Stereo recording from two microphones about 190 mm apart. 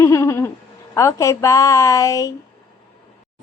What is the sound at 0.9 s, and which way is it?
A woman's voice, 15° left (ahead or behind).